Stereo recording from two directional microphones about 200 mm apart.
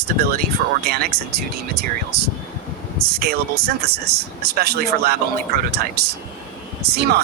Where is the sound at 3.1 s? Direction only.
50° right (ahead or behind).